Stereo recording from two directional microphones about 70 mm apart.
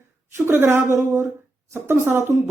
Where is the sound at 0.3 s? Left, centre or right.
Right.